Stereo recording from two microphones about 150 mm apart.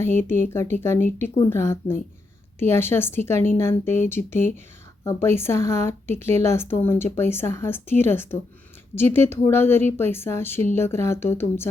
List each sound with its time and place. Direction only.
0.0 s speech: 15° left (ahead or behind)